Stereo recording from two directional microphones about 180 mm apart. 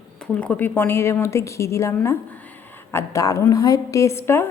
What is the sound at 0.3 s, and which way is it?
A woman's voice, 10° left (ahead or behind).